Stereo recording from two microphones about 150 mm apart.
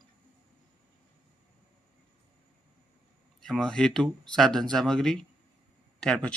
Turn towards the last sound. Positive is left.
turn(degrees=5)  # may be behind; listen again after turning